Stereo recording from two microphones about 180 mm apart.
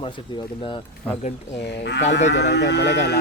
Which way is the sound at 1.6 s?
70° left (ahead or behind).